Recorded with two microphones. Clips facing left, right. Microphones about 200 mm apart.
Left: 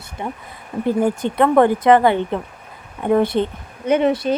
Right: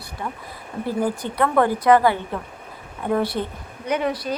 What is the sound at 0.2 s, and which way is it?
Speech, 20° left (ahead or behind).